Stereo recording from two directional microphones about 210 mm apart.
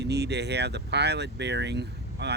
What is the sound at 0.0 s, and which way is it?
Speech, 50° right (ahead or behind).